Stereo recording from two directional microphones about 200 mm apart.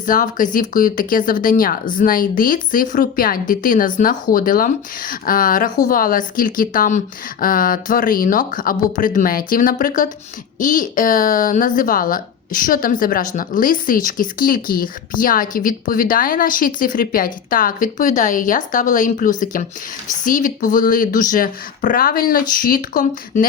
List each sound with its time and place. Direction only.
0.0 s speech: 40° left (ahead or behind)